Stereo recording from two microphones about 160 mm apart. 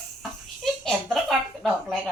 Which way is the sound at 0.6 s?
Centre (ahead or behind).